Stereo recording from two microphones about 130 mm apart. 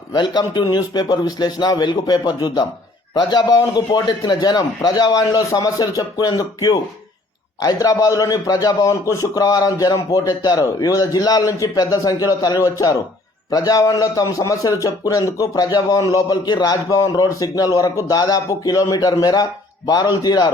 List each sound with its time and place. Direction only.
0.1 s a man's voice: 35° left (ahead or behind)